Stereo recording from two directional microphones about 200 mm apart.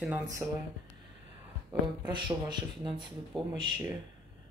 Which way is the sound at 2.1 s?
25° right (ahead or behind).